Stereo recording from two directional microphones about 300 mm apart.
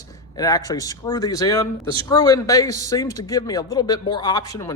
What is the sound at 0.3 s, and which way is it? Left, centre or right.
A man's voice, centre.